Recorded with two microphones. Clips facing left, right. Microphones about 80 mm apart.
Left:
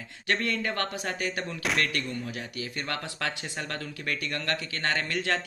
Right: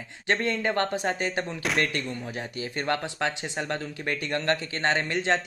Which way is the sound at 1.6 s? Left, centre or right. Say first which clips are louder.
Right 1 dB; centre.